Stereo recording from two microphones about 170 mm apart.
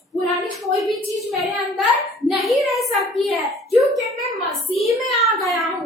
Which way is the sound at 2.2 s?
Centre (ahead or behind).